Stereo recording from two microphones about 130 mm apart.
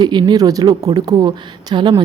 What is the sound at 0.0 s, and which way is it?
A woman's voice, 35° right (ahead or behind).